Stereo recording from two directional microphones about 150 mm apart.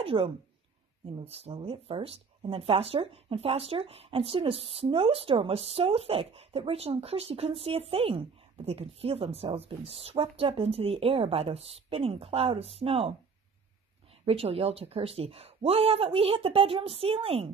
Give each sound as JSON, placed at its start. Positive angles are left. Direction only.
{"t": 0.0, "sound": "speech", "side_deg": -40}
{"t": 14.2, "sound": "speech", "side_deg": -40}